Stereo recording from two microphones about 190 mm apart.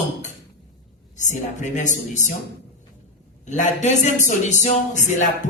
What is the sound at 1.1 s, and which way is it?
Speech, 40° left (ahead or behind).